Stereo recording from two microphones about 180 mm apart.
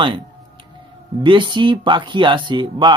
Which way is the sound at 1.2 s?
25° right (ahead or behind).